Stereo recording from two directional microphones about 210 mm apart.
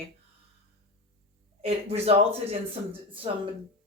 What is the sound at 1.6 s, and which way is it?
Speech, 30° right (ahead or behind).